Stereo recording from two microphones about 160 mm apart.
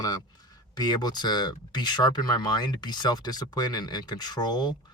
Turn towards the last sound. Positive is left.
turn(degrees=25)  # may be behind; listen again after turning